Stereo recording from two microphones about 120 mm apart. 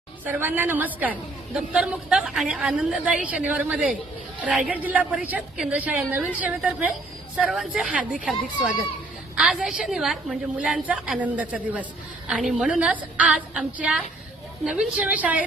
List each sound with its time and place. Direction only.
0.3 s a woman's voice: 15° right (ahead or behind)
9.3 s a woman's voice: 5° right (ahead or behind)